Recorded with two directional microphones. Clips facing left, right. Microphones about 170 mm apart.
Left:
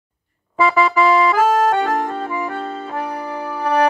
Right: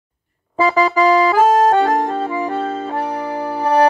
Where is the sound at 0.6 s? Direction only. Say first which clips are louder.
Right 1 dB; 35° right (ahead or behind).